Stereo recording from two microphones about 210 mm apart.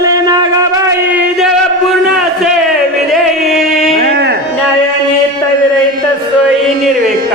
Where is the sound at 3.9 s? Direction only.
50° right (ahead or behind).